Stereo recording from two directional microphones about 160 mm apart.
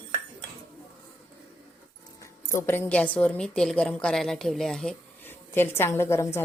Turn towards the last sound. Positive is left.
turn(degrees=15)  # may be behind; listen again after turning